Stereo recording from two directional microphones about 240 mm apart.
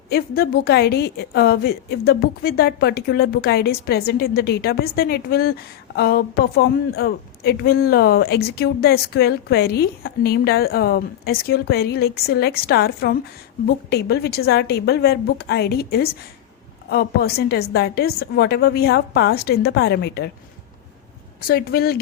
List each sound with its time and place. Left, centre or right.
0.1 s a woman's voice: left
21.4 s a woman's voice: left